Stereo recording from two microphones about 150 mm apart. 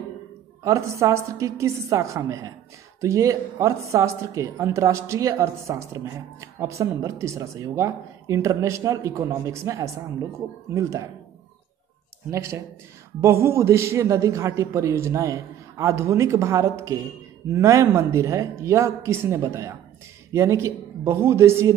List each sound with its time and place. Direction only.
0.7 s a woman's voice: 20° right (ahead or behind)
12.3 s a woman's voice: 20° right (ahead or behind)